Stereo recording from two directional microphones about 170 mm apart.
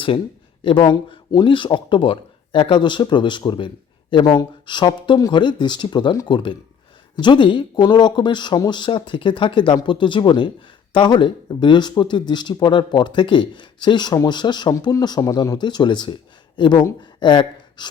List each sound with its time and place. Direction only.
0.6 s speech: 30° left (ahead or behind)